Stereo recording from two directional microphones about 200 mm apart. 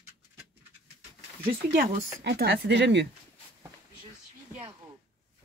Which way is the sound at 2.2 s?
55° right (ahead or behind).